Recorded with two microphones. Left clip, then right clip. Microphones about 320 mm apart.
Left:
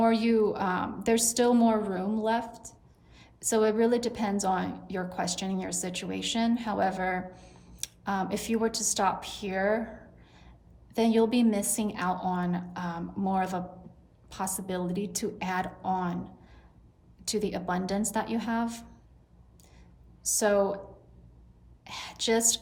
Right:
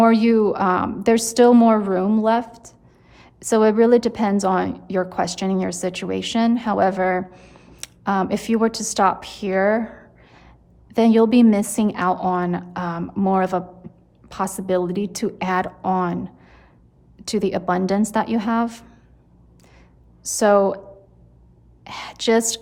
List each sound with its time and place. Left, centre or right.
0.0 s a woman's voice: right
20.2 s a woman's voice: right
21.8 s a woman's voice: right